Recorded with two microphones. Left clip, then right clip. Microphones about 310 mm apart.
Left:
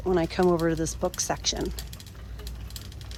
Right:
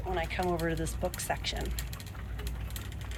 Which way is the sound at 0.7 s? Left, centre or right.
Left.